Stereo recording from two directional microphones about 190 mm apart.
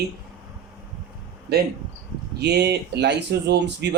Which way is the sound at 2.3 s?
60° right (ahead or behind).